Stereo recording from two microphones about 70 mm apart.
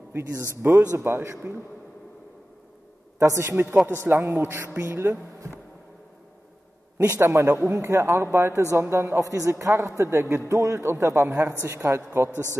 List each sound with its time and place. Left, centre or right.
0.1 s a man's voice: right
3.2 s a man's voice: right
3.8 s a man's voice: right
7.2 s a man's voice: right
9.2 s a man's voice: right
12.3 s speech: left